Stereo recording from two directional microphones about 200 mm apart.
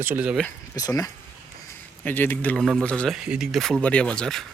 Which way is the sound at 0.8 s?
20° left (ahead or behind).